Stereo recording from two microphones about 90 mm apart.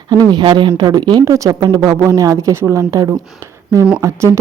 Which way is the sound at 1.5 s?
50° right (ahead or behind).